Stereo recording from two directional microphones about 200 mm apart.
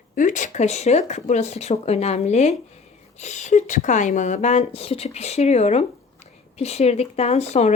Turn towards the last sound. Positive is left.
turn(degrees=35)  # may be behind; listen again after turning